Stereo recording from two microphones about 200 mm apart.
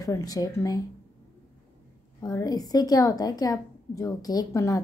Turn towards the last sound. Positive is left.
turn(degrees=15)  # may be behind; listen again after turning